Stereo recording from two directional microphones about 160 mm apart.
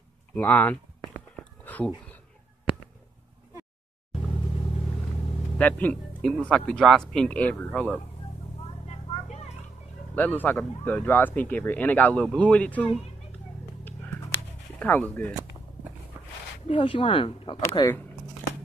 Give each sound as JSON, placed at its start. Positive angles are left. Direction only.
{"t": 0.3, "sound": "speech", "side_deg": 10}
{"t": 1.3, "sound": "whispering", "side_deg": 10}
{"t": 5.6, "sound": "speech", "side_deg": 10}
{"t": 8.8, "sound": "a sound", "side_deg": 40}
{"t": 10.1, "sound": "speech", "side_deg": 10}
{"t": 14.8, "sound": "speech", "side_deg": 10}
{"t": 16.6, "sound": "speech", "side_deg": 35}
{"t": 17.6, "sound": "speech", "side_deg": 20}